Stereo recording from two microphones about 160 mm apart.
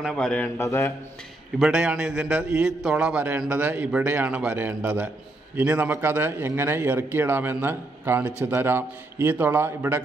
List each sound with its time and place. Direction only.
0.0 s speech: 5° left (ahead or behind)
0.6 s speech: 15° left (ahead or behind)
1.6 s a man's voice: 5° right (ahead or behind)